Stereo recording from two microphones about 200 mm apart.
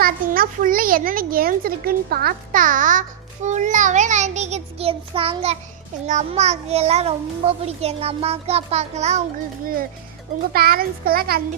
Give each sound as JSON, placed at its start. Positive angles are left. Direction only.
{"t": 0.0, "sound": "a child's voice", "side_deg": -45}
{"t": 10.5, "sound": "a child's voice", "side_deg": -50}